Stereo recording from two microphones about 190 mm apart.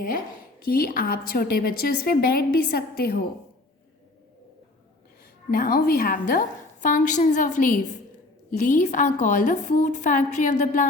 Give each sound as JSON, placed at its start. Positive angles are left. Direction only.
{"t": 0.6, "sound": "a woman's voice", "side_deg": 50}
{"t": 5.5, "sound": "a woman's voice", "side_deg": 55}